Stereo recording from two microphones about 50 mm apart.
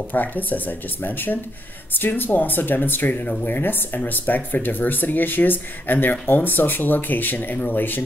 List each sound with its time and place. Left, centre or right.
0.1 s speech: left